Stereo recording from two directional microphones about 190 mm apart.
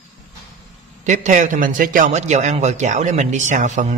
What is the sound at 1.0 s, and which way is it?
A man's voice, 40° right (ahead or behind).